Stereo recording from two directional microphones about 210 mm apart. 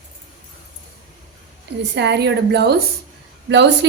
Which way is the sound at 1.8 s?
55° right (ahead or behind).